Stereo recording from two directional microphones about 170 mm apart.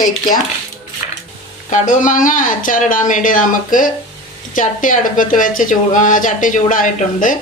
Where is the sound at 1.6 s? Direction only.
45° left (ahead or behind).